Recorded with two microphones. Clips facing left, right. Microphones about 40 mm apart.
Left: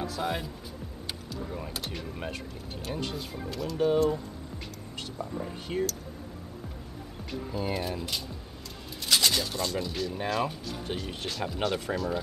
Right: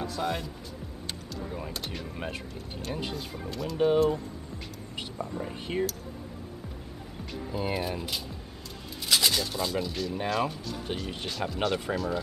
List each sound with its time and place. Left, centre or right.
0.0 s speech: centre
1.6 s speech: centre
3.7 s speech: centre
5.4 s speech: centre
7.5 s speech: centre